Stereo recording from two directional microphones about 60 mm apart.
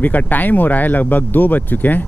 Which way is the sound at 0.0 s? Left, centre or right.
Left.